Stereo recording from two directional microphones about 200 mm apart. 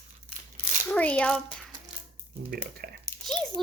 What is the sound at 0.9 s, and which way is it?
Speech, 5° left (ahead or behind).